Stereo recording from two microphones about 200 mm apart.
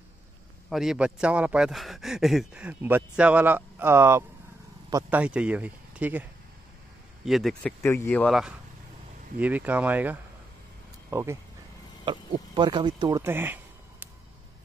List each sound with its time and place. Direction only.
0.7 s speech: centre (ahead or behind)
7.2 s speech: centre (ahead or behind)
12.5 s speech: 20° right (ahead or behind)